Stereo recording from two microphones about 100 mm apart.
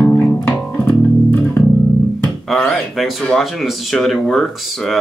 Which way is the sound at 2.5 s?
Centre (ahead or behind).